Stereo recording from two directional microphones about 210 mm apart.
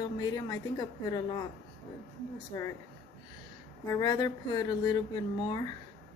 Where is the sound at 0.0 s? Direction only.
20° left (ahead or behind).